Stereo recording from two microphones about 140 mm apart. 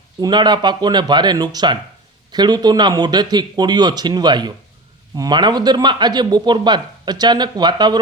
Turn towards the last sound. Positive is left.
turn(degrees=-30)  # may be behind; listen again after turning